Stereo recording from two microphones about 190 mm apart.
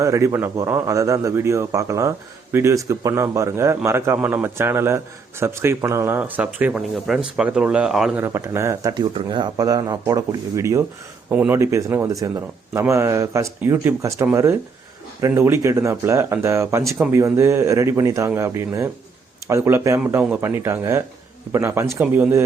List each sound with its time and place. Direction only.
0.0 s a man's voice: 15° right (ahead or behind)